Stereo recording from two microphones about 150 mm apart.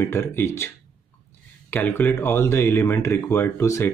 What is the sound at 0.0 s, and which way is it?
Speech, 15° left (ahead or behind).